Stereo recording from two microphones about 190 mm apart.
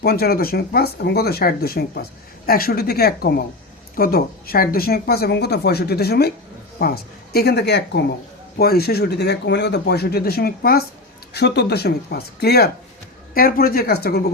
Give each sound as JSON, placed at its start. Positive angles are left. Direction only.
{"t": 0.0, "sound": "speech", "side_deg": 55}